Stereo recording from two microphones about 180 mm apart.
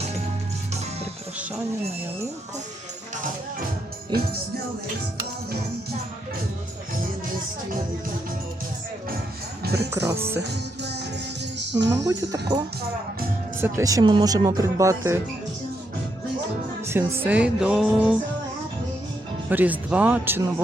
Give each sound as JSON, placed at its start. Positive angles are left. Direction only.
{"t": 9.7, "sound": "speech", "side_deg": -15}
{"t": 11.9, "sound": "speech", "side_deg": -20}
{"t": 16.8, "sound": "music", "side_deg": -15}
{"t": 19.5, "sound": "music", "side_deg": -10}